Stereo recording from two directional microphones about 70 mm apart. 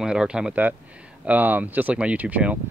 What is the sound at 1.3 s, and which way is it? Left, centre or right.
Speech, right.